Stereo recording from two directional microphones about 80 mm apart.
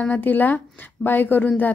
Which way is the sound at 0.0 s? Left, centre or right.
Centre.